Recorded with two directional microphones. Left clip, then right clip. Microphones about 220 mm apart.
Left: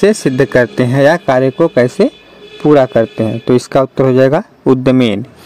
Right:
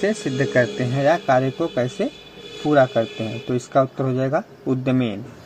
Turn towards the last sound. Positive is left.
turn(degrees=60)  # may be behind; listen again after turning